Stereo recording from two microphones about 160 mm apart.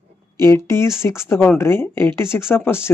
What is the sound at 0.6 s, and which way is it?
Speech, 15° left (ahead or behind).